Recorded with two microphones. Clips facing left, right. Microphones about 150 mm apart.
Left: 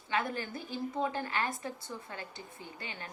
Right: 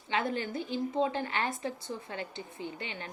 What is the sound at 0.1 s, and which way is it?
A woman's voice, 25° right (ahead or behind).